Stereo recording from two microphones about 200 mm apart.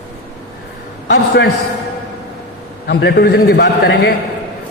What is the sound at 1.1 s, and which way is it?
Speech, 60° left (ahead or behind).